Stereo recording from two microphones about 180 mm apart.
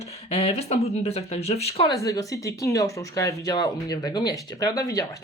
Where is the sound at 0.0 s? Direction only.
35° left (ahead or behind).